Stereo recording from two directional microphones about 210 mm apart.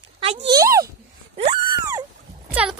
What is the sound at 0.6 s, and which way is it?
Speech, 15° right (ahead or behind).